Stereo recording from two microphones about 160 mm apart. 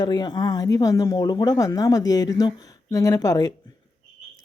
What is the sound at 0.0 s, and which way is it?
Speech, 25° left (ahead or behind).